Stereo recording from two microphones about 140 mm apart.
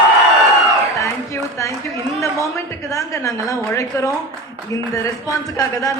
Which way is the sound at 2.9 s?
20° left (ahead or behind).